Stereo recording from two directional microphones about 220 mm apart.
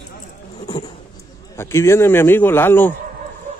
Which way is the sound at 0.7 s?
20° left (ahead or behind).